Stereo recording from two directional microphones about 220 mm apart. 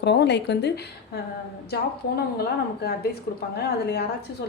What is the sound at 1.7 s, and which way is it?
A woman's voice, 45° left (ahead or behind).